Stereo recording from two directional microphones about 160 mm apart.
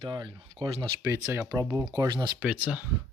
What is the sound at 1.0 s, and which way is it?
Speech, 15° right (ahead or behind).